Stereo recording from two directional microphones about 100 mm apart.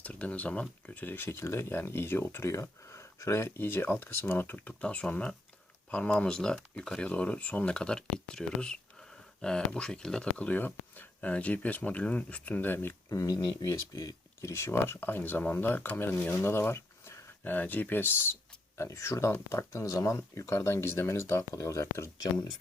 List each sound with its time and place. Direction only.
0.0 s speech: 15° left (ahead or behind)
13.1 s speech: 35° left (ahead or behind)
22.2 s speech: 40° left (ahead or behind)